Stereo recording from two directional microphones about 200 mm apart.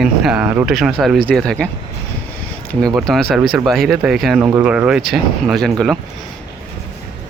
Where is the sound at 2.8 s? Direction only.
Centre (ahead or behind).